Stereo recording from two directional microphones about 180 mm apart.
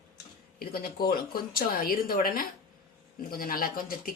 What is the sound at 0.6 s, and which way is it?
Speech, 55° left (ahead or behind).